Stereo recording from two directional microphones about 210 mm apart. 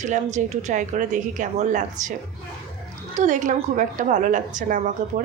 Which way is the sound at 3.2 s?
35° right (ahead or behind).